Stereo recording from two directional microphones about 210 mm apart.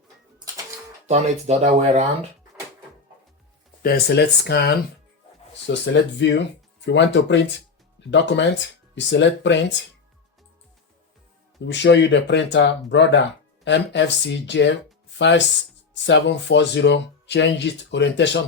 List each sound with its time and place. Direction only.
0.3 s bird: 15° right (ahead or behind)
1.0 s speech: 30° right (ahead or behind)
3.8 s speech: 50° left (ahead or behind)
11.6 s speech: 55° left (ahead or behind)